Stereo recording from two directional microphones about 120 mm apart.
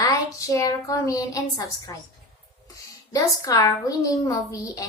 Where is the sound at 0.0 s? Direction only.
30° left (ahead or behind).